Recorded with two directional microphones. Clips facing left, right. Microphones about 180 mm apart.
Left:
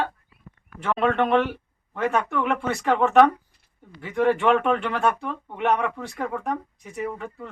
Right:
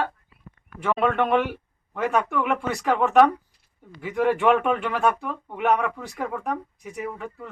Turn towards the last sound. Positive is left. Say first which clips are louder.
# left 2 dB
turn(degrees=0)  # may be behind; listen again after turning